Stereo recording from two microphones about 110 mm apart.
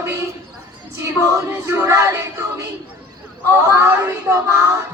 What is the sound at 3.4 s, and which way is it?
Female singing, 25° right (ahead or behind).